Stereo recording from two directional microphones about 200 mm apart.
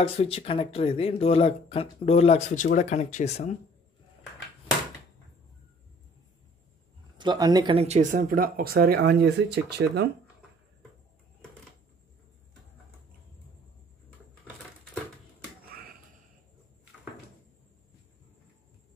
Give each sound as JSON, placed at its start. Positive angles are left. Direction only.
{"t": 0.0, "sound": "speech", "side_deg": 30}
{"t": 7.2, "sound": "speech", "side_deg": -20}